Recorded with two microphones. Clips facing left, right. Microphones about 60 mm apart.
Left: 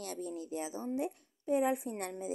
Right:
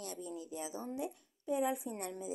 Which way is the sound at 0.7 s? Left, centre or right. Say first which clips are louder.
Left 4 dB; left.